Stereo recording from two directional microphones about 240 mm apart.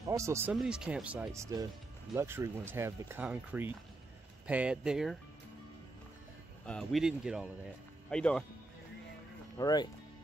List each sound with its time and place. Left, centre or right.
0.0 s speech: centre
6.6 s speech: centre
9.6 s speech: centre